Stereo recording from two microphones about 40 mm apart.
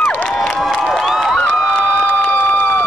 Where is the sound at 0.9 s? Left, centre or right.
Centre.